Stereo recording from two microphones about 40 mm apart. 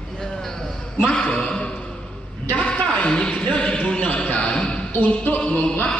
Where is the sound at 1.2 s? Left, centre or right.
Left.